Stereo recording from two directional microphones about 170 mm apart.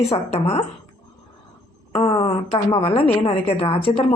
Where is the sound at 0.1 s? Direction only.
35° left (ahead or behind).